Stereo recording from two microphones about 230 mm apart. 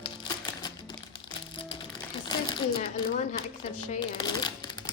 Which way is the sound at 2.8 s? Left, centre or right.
Left.